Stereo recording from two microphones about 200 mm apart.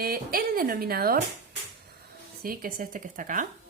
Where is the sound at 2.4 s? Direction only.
45° right (ahead or behind).